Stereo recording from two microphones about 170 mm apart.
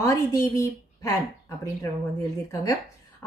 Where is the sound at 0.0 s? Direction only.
20° left (ahead or behind).